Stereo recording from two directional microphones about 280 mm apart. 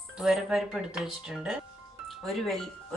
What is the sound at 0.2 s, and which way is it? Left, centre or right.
Speech, centre.